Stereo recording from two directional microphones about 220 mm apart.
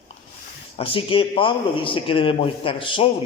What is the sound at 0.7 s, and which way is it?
A man's voice, 25° left (ahead or behind).